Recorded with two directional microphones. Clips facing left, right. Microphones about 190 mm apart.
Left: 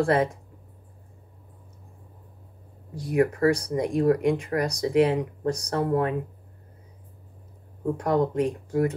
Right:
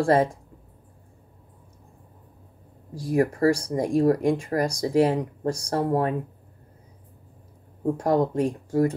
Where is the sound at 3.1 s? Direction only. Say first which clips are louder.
Right 1 dB; 35° right (ahead or behind).